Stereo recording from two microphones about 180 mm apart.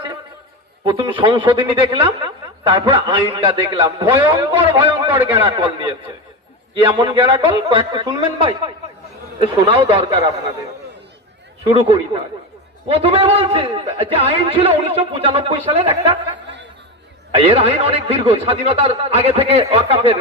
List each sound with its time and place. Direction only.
0.9 s speech: 25° right (ahead or behind)
7.0 s speech: 25° right (ahead or behind)
11.7 s speech: 30° right (ahead or behind)
17.3 s speech: 30° right (ahead or behind)